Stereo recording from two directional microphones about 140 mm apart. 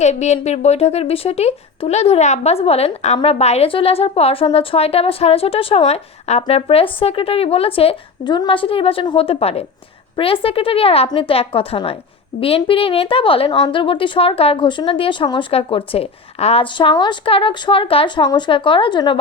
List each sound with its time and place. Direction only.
0.0 s a woman's voice: 55° left (ahead or behind); by 19.1 s 35° left (ahead or behind)